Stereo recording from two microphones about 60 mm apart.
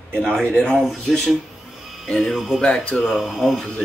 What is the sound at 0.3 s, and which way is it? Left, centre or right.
Speech, centre.